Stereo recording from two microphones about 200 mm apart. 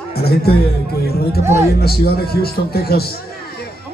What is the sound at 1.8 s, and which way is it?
A man's voice, 50° left (ahead or behind).